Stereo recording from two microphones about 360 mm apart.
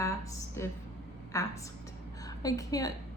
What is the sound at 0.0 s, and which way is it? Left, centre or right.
A woman's voice, centre.